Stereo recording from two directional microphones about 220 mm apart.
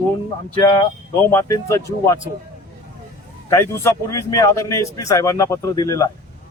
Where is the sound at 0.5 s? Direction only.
15° left (ahead or behind).